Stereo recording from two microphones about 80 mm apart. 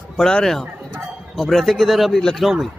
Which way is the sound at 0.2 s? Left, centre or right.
Centre.